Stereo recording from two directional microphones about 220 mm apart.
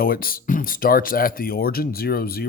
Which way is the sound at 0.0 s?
40° left (ahead or behind).